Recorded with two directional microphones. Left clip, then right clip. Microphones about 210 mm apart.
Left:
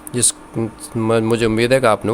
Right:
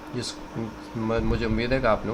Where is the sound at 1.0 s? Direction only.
50° left (ahead or behind).